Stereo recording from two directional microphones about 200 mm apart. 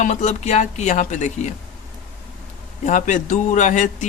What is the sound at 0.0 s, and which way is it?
A man's voice, 35° left (ahead or behind).